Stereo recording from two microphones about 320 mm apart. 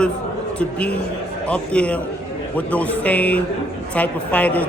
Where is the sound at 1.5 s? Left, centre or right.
Centre.